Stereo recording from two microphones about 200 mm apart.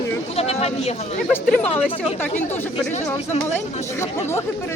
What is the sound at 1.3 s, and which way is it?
Speech, 5° left (ahead or behind).